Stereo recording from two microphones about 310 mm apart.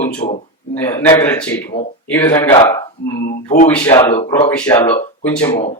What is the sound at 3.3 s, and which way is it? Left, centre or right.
Speech, left.